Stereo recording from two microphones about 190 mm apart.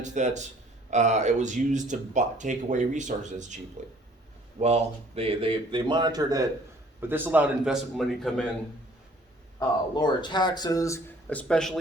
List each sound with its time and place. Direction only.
0.0 s speech: 40° right (ahead or behind)
4.6 s a man's voice: 35° right (ahead or behind); by 8.4 s centre (ahead or behind)
9.6 s speech: 20° left (ahead or behind); by 11.8 s 5° left (ahead or behind)